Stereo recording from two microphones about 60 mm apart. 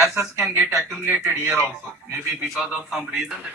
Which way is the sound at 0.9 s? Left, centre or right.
Right.